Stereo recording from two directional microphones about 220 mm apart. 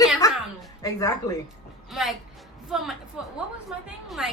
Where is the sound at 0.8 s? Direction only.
15° left (ahead or behind).